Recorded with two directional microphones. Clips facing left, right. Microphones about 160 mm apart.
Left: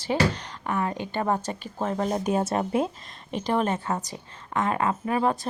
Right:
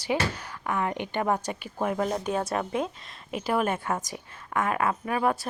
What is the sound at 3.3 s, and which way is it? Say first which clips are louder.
A woman's voice: left 1 dB; 5° right (ahead or behind).